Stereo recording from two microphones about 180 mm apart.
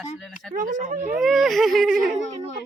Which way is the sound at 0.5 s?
40° right (ahead or behind).